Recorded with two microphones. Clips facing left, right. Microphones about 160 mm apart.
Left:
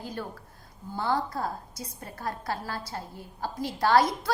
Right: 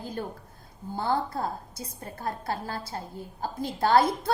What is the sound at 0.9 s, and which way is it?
A woman's voice, 25° right (ahead or behind).